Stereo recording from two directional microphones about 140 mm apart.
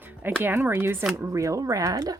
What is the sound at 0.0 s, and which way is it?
Speech, 15° right (ahead or behind).